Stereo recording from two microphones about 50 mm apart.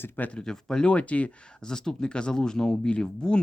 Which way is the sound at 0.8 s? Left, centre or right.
Left.